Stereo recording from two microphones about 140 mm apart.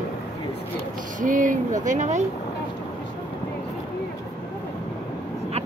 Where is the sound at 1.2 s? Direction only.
70° right (ahead or behind).